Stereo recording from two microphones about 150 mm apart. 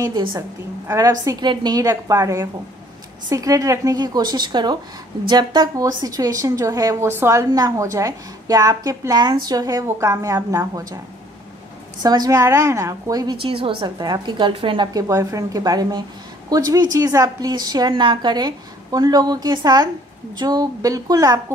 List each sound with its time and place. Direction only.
0.0 s a woman's voice: 30° right (ahead or behind)
12.0 s a woman's voice: 25° right (ahead or behind)